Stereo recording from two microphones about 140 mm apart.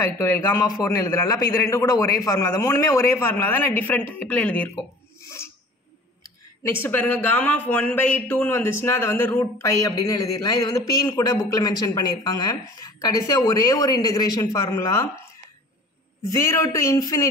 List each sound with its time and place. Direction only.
0.0 s a man's voice: 20° left (ahead or behind)
6.8 s a man's voice: 10° left (ahead or behind)
16.3 s a man's voice: 25° left (ahead or behind)